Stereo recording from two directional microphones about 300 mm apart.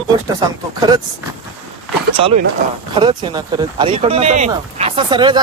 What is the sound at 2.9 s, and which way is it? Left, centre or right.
Speech, centre.